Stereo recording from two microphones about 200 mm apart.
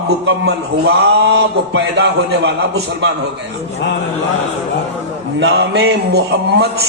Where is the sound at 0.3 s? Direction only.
60° right (ahead or behind).